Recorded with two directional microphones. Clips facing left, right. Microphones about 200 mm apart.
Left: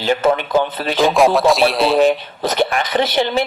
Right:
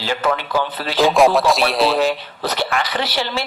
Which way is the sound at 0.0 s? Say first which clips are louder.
Left 5 dB; 20° left (ahead or behind).